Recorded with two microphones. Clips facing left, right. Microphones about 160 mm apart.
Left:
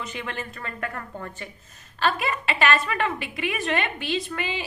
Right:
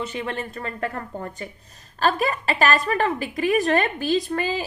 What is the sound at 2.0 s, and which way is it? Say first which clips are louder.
A woman's voice: right 3 dB; 40° right (ahead or behind).